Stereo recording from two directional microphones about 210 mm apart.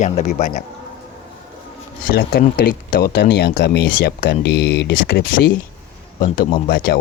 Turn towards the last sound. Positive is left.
turn(degrees=45)  # may be behind; listen again after turning